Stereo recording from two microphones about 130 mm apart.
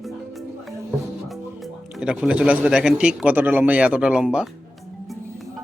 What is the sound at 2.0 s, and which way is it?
A man's voice, 5° right (ahead or behind).